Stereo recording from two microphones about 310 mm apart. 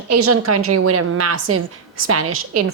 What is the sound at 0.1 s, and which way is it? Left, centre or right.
A woman's voice, right.